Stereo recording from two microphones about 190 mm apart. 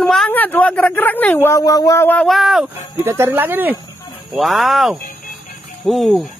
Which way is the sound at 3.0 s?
15° right (ahead or behind).